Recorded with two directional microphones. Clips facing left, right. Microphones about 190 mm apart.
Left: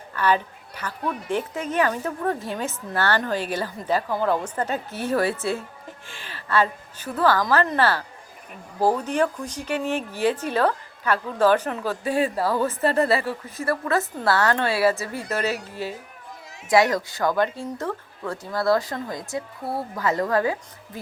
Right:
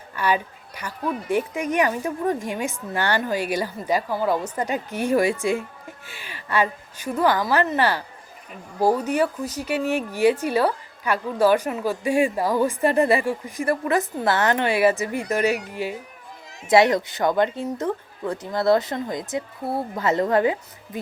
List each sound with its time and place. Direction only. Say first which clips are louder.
0.1 s a woman's voice: left 1 dB; 10° right (ahead or behind)